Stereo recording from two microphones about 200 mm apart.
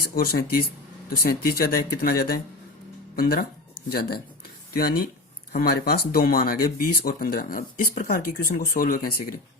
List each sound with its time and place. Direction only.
0.0 s speech: 50° left (ahead or behind)